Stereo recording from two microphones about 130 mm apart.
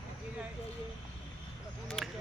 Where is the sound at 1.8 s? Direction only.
Centre (ahead or behind).